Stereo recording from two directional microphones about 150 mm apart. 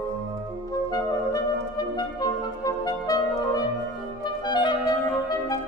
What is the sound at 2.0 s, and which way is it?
Clarinet, 25° left (ahead or behind).